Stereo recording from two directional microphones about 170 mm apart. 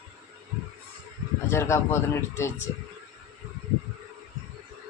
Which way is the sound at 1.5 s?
15° left (ahead or behind).